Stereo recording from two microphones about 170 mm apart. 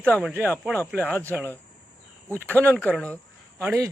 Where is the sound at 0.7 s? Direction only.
Centre (ahead or behind).